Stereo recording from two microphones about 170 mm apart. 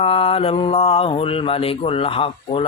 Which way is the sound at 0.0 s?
35° left (ahead or behind).